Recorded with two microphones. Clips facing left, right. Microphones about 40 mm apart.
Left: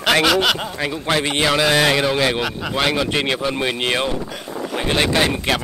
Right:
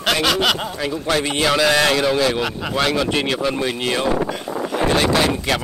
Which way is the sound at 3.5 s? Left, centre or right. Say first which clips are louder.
Left 1 dB; left.